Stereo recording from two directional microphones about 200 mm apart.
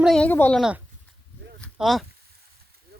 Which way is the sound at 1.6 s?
Centre (ahead or behind).